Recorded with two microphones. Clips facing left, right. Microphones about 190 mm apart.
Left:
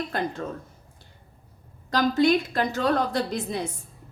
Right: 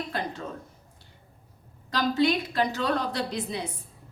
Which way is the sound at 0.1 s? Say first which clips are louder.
Left 4 dB; 50° left (ahead or behind).